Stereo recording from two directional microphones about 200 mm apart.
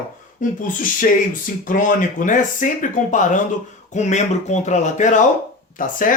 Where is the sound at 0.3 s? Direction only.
45° left (ahead or behind).